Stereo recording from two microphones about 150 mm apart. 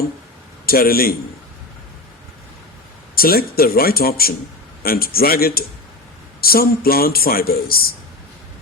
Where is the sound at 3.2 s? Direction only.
85° left.